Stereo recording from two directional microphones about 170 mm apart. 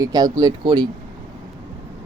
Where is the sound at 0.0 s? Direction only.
20° right (ahead or behind).